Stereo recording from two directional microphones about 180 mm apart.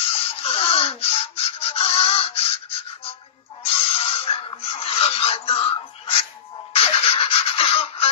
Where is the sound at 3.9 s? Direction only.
30° left (ahead or behind).